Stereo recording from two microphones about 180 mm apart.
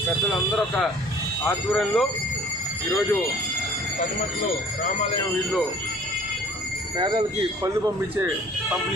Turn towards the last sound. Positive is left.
turn(degrees=-25)  # may be behind; listen again after turning